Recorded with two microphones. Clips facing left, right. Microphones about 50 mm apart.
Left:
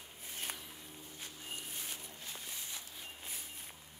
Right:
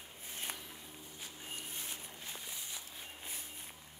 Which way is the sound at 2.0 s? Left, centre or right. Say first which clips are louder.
Right 1 dB; right.